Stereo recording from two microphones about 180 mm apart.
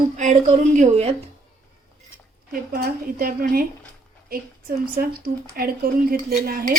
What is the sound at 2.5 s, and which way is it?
Speech, 55° right (ahead or behind).